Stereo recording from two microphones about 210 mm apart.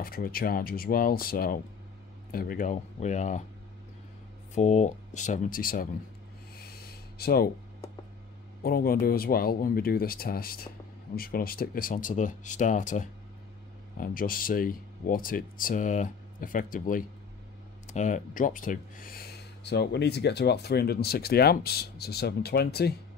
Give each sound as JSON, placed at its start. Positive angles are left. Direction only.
{"t": 0.0, "sound": "speech", "side_deg": 45}
{"t": 4.6, "sound": "speech", "side_deg": 35}
{"t": 6.5, "sound": "a sound", "side_deg": 45}
{"t": 8.6, "sound": "speech", "side_deg": 45}